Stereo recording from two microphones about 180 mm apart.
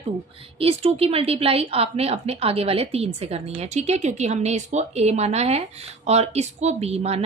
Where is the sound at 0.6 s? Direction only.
35° right (ahead or behind).